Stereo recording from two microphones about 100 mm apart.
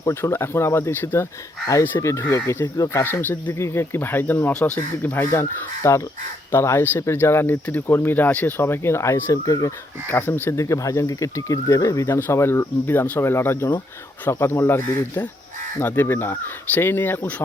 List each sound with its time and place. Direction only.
0.0 s speech: 25° left (ahead or behind)
3.0 s speech: 20° left (ahead or behind)
10.1 s speech: 20° left (ahead or behind)
10.6 s speech: 35° left (ahead or behind)